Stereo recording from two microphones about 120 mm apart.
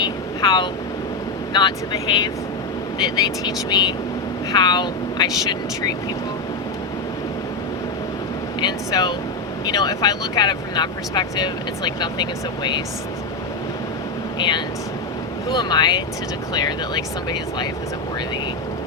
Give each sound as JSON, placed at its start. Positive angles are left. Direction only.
{"t": 0.0, "sound": "vehicle", "side_deg": 40}
{"t": 1.5, "sound": "speech", "side_deg": 40}
{"t": 8.6, "sound": "speech", "side_deg": 35}
{"t": 14.3, "sound": "speech", "side_deg": 40}